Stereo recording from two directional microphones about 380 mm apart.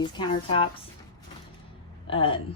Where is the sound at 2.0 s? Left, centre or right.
Centre.